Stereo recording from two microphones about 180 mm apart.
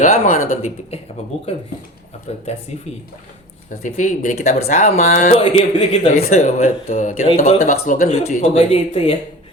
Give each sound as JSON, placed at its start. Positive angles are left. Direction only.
{"t": 0.0, "sound": "speech", "side_deg": 45}
{"t": 3.8, "sound": "speech", "side_deg": 45}
{"t": 5.4, "sound": "speech", "side_deg": 30}